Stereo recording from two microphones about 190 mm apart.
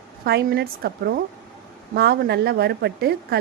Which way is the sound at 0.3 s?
55° right (ahead or behind).